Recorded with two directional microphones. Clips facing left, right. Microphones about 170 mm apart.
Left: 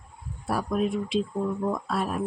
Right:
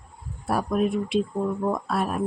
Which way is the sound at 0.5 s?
55° right (ahead or behind).